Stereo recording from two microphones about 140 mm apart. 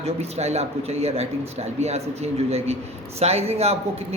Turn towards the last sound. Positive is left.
turn(degrees=-45)  # may be behind; listen again after turning